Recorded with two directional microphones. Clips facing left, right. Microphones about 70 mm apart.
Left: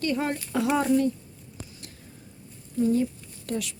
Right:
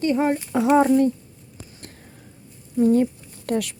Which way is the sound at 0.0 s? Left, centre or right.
Right.